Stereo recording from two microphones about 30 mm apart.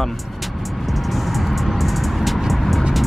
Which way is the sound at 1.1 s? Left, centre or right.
Centre.